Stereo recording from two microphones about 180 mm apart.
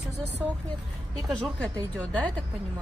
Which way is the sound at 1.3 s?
5° left (ahead or behind).